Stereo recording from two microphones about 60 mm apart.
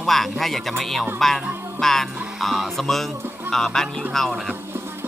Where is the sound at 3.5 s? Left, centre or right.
Centre.